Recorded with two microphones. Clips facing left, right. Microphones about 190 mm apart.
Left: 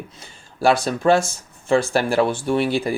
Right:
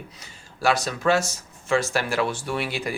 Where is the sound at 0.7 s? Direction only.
55° left (ahead or behind).